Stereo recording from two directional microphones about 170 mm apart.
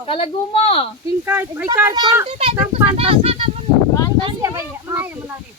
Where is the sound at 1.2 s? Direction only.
10° right (ahead or behind).